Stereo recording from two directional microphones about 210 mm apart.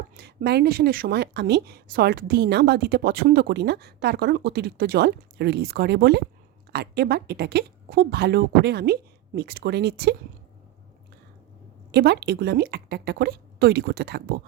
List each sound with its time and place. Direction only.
0.2 s a woman's voice: 50° right (ahead or behind)
11.9 s a woman's voice: 50° right (ahead or behind)